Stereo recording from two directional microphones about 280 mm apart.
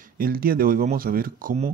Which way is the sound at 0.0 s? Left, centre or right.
Right.